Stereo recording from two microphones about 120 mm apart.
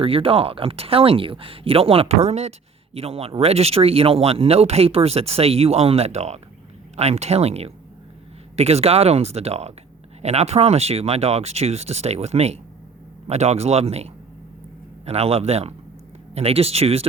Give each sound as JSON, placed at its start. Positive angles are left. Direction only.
{"t": 0.0, "sound": "speech", "side_deg": -50}